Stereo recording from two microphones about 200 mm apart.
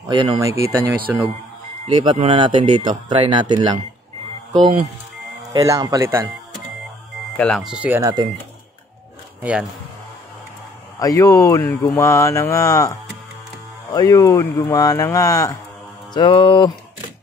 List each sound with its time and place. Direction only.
0.1 s speech: 20° right (ahead or behind)
1.9 s speech: 25° right (ahead or behind)
5.5 s speech: 20° right (ahead or behind)
7.3 s speech: 5° left (ahead or behind)
9.4 s speech: 5° right (ahead or behind)
11.0 s speech: 15° left (ahead or behind)
13.9 s speech: 15° left (ahead or behind)
16.1 s music: 25° left (ahead or behind)